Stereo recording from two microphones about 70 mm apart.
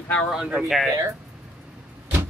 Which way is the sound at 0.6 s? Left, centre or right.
Centre.